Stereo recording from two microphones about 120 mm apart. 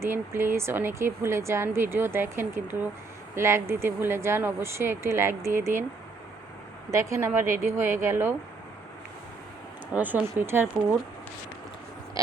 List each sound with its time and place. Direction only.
0.0 s speech: 20° right (ahead or behind)
6.9 s speech: 25° right (ahead or behind)
9.9 s speech: 15° right (ahead or behind)